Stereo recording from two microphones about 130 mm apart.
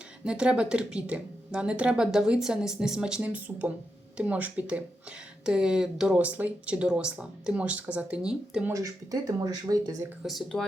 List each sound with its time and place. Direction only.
0.3 s speech: 5° right (ahead or behind)
8.7 s speech: 30° right (ahead or behind)
10.2 s speech: 5° left (ahead or behind)